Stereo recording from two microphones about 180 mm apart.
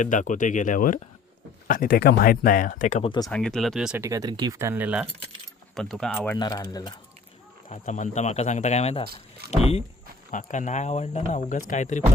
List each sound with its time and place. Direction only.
0.0 s speech: 45° left (ahead or behind)
3.2 s speech: 5° left (ahead or behind)
4.0 s speech: 20° right (ahead or behind); by 6.3 s centre (ahead or behind)
6.3 s speech: 20° left (ahead or behind)
7.7 s speech: 40° left (ahead or behind)
9.4 s speech: 60° right (ahead or behind)
10.3 s speech: 45° left (ahead or behind)